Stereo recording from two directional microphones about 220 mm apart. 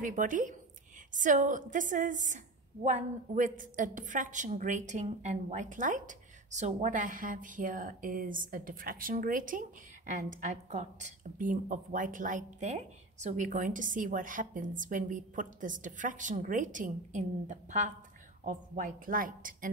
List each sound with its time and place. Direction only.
0.0 s a woman's voice: 35° right (ahead or behind)